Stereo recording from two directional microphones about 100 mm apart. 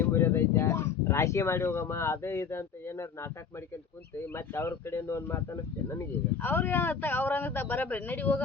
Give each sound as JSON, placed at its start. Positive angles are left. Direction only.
{"t": 0.0, "sound": "speech", "side_deg": 25}
{"t": 4.4, "sound": "speech", "side_deg": 25}